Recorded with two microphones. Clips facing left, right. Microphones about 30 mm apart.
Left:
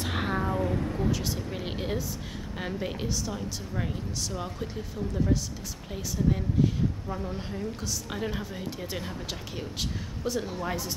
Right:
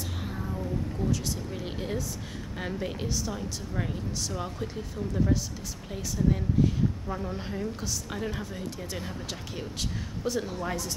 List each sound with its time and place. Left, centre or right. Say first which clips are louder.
0.0 s a sound: left 7 dB; left
1.0 s speech: left 1 dB; centre
2.6 s speech: even; centre
7.1 s speech: right 1 dB; centre
8.1 s speech: left 3 dB; centre
10.2 s speech: even; centre